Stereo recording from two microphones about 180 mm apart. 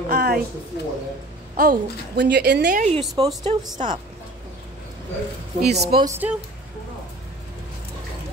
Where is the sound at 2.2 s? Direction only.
70° right (ahead or behind).